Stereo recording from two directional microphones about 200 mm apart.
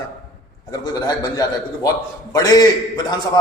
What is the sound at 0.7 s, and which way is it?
A man's voice, 20° left (ahead or behind).